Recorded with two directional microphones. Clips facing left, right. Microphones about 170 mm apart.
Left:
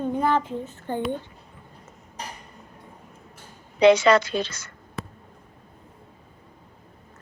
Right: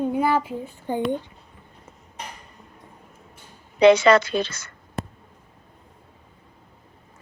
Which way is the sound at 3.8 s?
60° right (ahead or behind).